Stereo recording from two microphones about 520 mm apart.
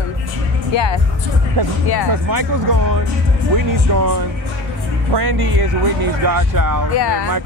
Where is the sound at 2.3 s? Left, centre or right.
Right.